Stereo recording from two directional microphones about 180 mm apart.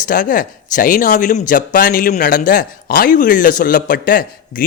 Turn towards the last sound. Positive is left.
turn(degrees=50)  # may be behind; listen again after turning